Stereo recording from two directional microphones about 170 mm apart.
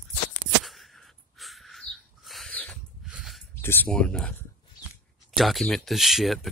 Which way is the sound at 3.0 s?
5° right (ahead or behind).